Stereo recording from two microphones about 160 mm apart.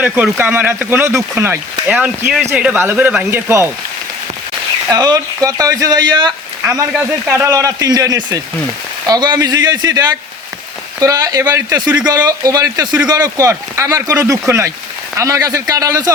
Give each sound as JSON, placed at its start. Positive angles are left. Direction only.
{"t": 0.0, "sound": "speech", "side_deg": -10}
{"t": 4.9, "sound": "speech", "side_deg": -25}